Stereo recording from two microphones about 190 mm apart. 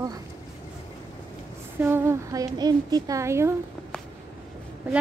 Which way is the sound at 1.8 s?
10° right (ahead or behind).